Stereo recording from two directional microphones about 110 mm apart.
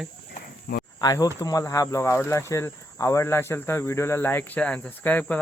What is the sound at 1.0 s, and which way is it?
Speech, 35° left (ahead or behind).